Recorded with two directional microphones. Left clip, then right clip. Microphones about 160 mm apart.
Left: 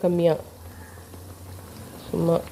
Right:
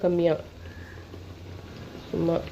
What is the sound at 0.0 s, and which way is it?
Speech, 15° left (ahead or behind).